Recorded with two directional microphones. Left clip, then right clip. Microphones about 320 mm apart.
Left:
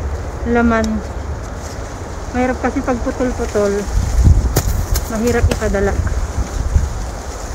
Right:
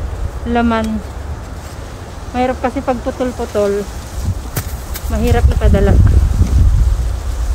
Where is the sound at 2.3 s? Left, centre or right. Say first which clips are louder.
Right 1 dB; centre.